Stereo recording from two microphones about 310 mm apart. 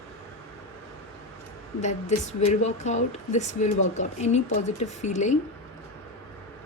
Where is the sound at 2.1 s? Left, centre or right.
Left.